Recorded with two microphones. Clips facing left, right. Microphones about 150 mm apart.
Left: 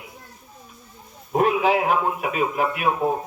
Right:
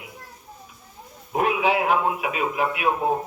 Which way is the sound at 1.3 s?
40° left (ahead or behind).